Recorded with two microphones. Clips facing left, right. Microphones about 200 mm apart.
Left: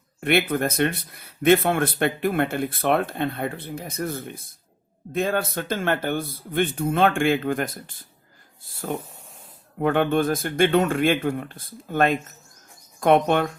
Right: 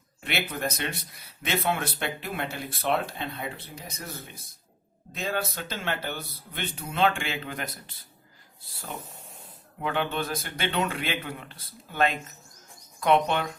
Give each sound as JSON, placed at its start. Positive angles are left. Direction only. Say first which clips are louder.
{"t": 0.2, "sound": "speech", "louder": "left 10 dB", "side_deg": 55}
{"t": 9.8, "sound": "speech", "louder": "left 9 dB", "side_deg": 50}